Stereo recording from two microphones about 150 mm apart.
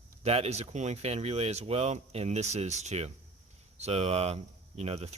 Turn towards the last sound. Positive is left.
turn(degrees=-40)  # may be behind; listen again after turning